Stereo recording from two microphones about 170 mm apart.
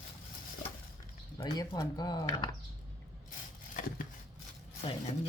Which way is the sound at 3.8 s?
55° left (ahead or behind).